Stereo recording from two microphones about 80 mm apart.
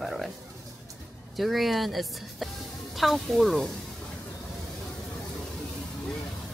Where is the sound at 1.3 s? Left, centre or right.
Centre.